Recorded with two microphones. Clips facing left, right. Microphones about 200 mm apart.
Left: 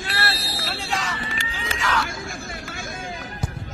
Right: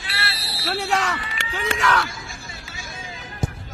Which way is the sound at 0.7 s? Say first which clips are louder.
Right 7 dB; 65° right (ahead or behind).